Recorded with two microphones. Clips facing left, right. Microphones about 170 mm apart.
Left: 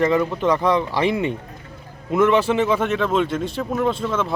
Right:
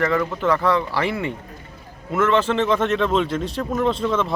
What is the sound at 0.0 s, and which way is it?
Speech, 20° left (ahead or behind).